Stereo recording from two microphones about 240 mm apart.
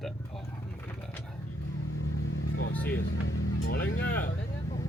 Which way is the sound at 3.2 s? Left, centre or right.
Left.